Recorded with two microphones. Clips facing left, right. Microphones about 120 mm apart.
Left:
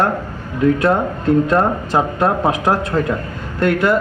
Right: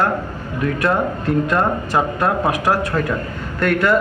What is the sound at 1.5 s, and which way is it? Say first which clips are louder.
A man's voice: left 3 dB; 25° left (ahead or behind).